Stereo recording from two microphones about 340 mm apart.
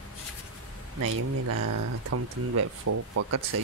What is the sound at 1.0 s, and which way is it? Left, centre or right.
Speech, right.